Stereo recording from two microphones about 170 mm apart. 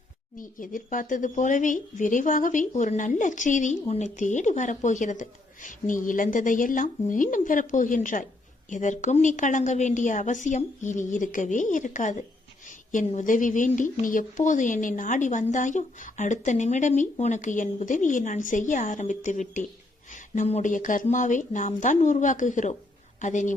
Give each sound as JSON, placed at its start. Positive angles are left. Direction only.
{"t": 0.3, "sound": "speech", "side_deg": 50}